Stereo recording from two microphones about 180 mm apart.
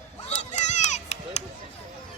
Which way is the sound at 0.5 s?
40° left (ahead or behind).